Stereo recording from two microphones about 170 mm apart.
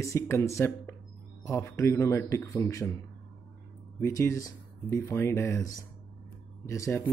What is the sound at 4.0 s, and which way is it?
Speech, 15° left (ahead or behind).